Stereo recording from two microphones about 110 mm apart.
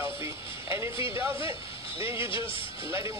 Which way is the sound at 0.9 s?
55° left (ahead or behind).